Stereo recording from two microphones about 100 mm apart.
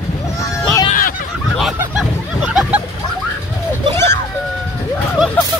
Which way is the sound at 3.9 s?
25° left (ahead or behind).